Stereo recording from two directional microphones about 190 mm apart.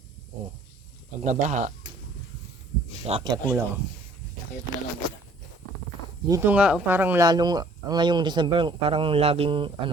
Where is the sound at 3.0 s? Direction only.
30° right (ahead or behind).